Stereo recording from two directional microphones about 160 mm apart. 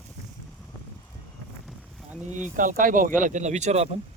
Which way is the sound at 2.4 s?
55° right (ahead or behind).